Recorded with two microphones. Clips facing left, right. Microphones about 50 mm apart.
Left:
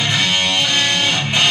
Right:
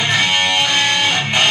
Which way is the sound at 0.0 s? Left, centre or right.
Right.